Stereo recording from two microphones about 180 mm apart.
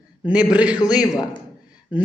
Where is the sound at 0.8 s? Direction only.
20° left (ahead or behind).